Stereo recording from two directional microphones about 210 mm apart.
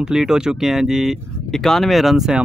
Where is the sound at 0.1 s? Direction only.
5° right (ahead or behind).